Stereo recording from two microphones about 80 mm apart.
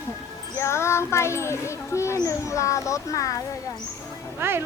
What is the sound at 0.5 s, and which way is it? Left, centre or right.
A child's voice, left.